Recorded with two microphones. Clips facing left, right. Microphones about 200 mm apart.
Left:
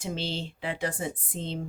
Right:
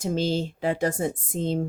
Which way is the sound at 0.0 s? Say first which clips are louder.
Right 8 dB; 45° right (ahead or behind).